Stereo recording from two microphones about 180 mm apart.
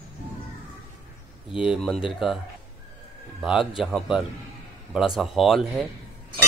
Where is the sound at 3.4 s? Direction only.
Centre (ahead or behind).